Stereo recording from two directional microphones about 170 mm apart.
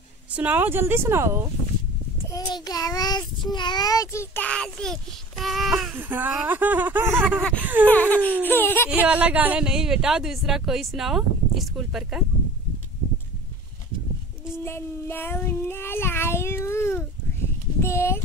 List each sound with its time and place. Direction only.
0.4 s speech: 10° right (ahead or behind)
2.3 s child singing: 20° left (ahead or behind); by 4.9 s 5° left (ahead or behind)
5.4 s a sound: centre (ahead or behind)
5.9 s speech: 10° right (ahead or behind)
7.6 s a sound: 10° right (ahead or behind)
7.9 s speech: 10° left (ahead or behind)
8.9 s speech: 10° right (ahead or behind)
14.5 s child singing: 15° left (ahead or behind)
17.8 s a sound: 15° left (ahead or behind)